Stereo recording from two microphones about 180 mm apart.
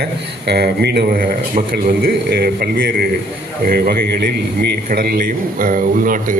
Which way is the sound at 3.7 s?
55° right (ahead or behind).